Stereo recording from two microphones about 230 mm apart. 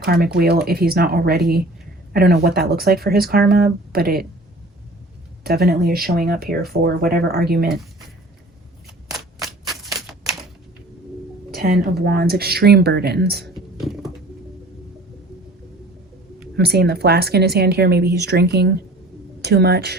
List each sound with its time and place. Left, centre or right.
0.0 s speech: right
5.4 s speech: right
9.1 s typewriter: centre
11.5 s speech: right
13.7 s pigeon: centre
16.6 s speech: right